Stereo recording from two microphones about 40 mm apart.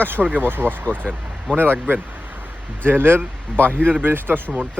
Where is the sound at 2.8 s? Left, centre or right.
Right.